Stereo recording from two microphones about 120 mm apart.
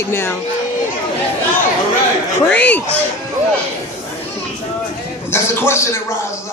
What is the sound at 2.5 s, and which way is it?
Speech, 10° left (ahead or behind).